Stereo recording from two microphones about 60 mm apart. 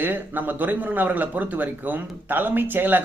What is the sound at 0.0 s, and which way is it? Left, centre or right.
Speech, right.